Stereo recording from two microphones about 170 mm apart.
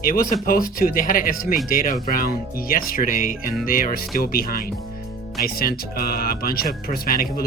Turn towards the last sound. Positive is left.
turn(degrees=60)  # may be behind; listen again after turning